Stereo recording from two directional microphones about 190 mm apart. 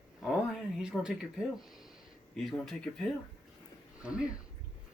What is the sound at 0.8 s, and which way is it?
Speech, 5° right (ahead or behind).